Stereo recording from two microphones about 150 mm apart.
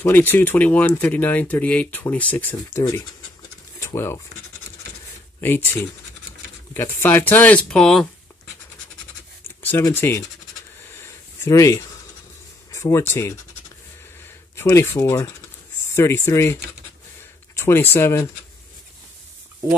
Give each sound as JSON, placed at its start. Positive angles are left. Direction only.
{"t": 0.0, "sound": "speech", "side_deg": 15}
{"t": 3.8, "sound": "speech", "side_deg": 15}
{"t": 5.4, "sound": "speech", "side_deg": 15}
{"t": 9.7, "sound": "speech", "side_deg": 15}
{"t": 11.0, "sound": "a sound", "side_deg": 20}
{"t": 12.7, "sound": "speech", "side_deg": 20}
{"t": 14.5, "sound": "speech", "side_deg": 20}
{"t": 17.6, "sound": "speech", "side_deg": 15}